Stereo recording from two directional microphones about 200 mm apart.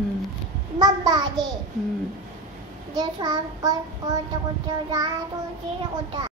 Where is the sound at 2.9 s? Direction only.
20° right (ahead or behind).